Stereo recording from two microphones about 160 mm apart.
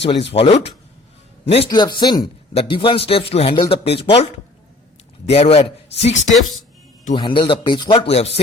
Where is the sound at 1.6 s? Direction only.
25° left (ahead or behind).